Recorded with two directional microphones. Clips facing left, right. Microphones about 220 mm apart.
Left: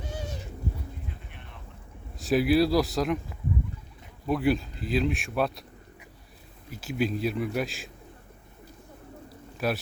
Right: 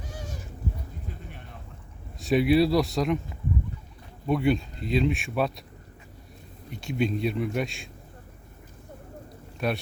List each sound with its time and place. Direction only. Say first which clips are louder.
2.1 s speech: right 1 dB; centre (ahead or behind)
4.3 s speech: right 1 dB; centre (ahead or behind)
6.7 s speech: right 1 dB; 5° left (ahead or behind)
9.6 s a man's voice: even; centre (ahead or behind)